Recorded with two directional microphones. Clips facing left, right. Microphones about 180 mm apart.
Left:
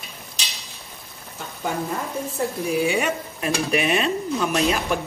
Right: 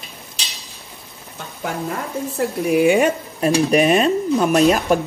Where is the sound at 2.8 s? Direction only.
55° right (ahead or behind).